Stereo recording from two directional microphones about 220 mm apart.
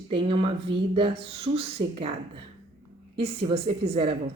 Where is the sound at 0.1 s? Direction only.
25° right (ahead or behind).